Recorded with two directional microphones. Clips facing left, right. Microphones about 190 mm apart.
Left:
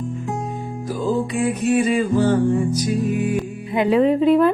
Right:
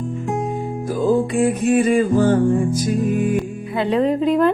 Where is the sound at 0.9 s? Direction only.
50° right (ahead or behind).